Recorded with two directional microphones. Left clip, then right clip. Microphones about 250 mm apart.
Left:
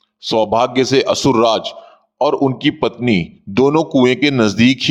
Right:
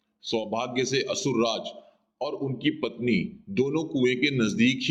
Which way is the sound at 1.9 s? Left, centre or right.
Left.